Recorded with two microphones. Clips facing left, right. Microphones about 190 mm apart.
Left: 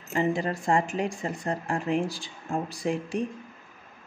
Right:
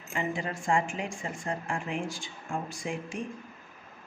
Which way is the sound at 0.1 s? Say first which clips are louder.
Left 6 dB; 35° left (ahead or behind).